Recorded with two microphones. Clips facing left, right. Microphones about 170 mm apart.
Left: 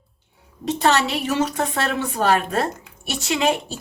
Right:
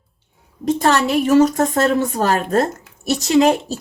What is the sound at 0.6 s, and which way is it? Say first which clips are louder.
A woman's voice: right 3 dB; 50° right (ahead or behind).